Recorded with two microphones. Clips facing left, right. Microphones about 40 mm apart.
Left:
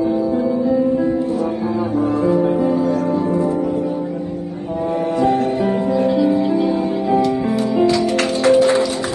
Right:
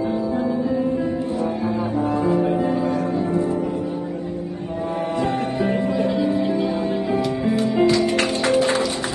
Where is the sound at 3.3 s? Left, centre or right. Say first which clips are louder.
Left 3 dB; left.